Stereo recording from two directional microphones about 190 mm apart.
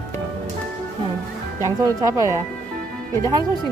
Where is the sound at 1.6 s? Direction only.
15° right (ahead or behind).